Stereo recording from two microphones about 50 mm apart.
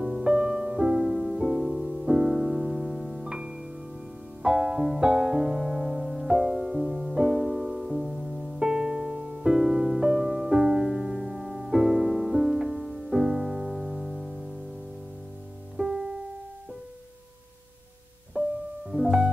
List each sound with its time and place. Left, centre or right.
0.0 s music: centre
15.8 s piano: centre
18.4 s piano: right
18.9 s piano: centre